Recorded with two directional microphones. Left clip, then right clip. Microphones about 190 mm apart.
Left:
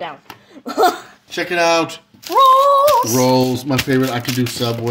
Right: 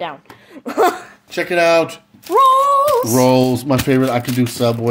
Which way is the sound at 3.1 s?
45° right (ahead or behind).